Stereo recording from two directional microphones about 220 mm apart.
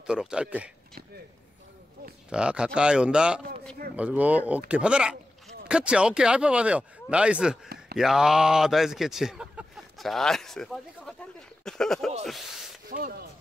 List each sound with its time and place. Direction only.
0.0 s speech: 5° right (ahead or behind)
2.2 s speech: 5° right (ahead or behind)
12.9 s speech: 40° right (ahead or behind)